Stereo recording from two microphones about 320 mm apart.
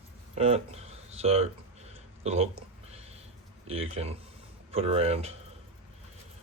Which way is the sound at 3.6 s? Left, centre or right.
Centre.